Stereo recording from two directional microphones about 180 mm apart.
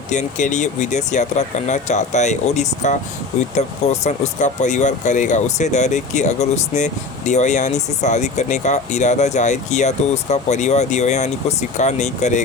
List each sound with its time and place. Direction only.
0.1 s speech: 40° left (ahead or behind)